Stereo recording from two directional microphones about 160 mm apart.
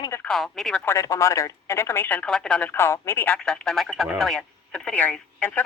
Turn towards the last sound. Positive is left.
turn(degrees=10)  # may be behind; listen again after turning